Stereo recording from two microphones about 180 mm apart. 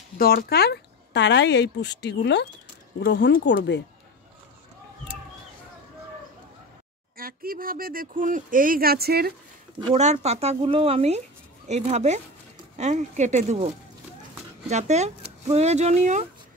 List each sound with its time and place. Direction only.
0.2 s speech: 55° left (ahead or behind); by 3.8 s 75° left (ahead or behind)
7.2 s speech: 55° right (ahead or behind)
9.9 s speech: 40° right (ahead or behind)